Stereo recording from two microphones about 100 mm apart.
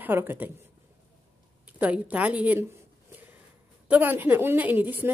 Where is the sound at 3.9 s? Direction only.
20° right (ahead or behind).